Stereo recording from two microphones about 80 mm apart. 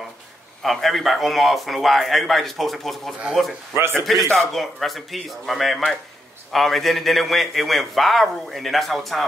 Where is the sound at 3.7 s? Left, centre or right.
Right.